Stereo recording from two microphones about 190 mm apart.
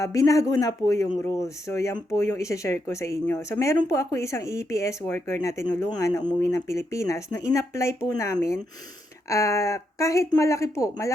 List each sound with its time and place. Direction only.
0.0 s speech: 20° left (ahead or behind)